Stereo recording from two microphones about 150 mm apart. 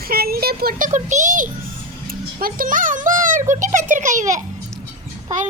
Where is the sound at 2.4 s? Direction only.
65° right (ahead or behind).